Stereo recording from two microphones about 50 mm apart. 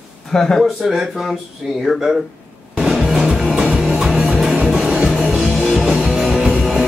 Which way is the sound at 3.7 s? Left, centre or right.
Right.